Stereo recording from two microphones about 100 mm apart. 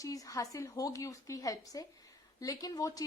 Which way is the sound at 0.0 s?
35° left (ahead or behind).